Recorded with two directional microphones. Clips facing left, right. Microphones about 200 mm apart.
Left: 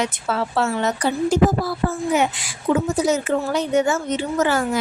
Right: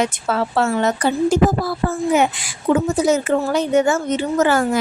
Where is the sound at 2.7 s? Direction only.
50° right (ahead or behind).